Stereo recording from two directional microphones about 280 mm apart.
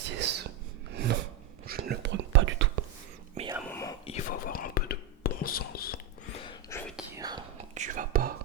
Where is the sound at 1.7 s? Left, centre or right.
Right.